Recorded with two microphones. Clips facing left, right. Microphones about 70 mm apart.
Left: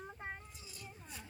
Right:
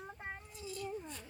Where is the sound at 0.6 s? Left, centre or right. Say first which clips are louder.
Right 16 dB; centre.